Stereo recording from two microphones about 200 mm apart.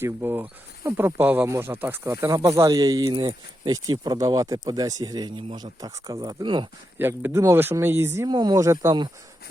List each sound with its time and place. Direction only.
0.0 s speech: 10° right (ahead or behind)
7.0 s speech: 10° right (ahead or behind)